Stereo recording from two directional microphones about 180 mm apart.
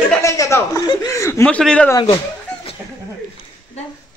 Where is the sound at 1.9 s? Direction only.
20° left (ahead or behind).